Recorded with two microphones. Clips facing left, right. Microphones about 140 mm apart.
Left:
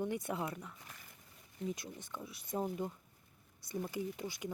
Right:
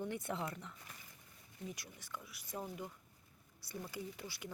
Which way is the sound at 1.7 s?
20° left (ahead or behind).